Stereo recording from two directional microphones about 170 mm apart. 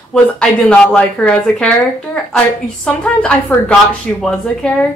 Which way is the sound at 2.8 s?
5° left (ahead or behind).